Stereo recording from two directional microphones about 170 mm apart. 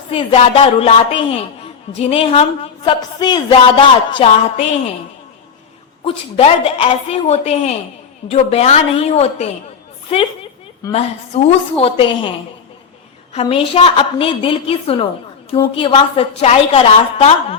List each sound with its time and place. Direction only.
0.1 s speech: 35° left (ahead or behind)
6.1 s speech: 35° left (ahead or behind)
10.9 s speech: 35° left (ahead or behind)
13.3 s speech: 35° left (ahead or behind)